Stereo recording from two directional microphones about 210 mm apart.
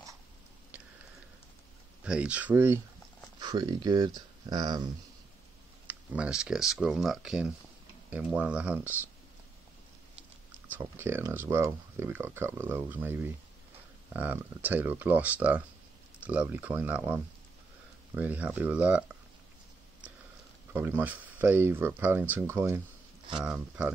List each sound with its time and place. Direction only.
2.0 s speech: 5° right (ahead or behind)
5.9 s speech: 5° right (ahead or behind)
10.7 s speech: 10° right (ahead or behind)
20.7 s speech: 10° right (ahead or behind)